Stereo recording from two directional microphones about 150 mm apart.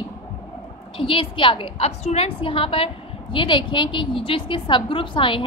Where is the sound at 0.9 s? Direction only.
35° left (ahead or behind).